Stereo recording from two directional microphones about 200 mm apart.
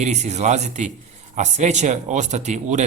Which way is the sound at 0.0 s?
35° right (ahead or behind).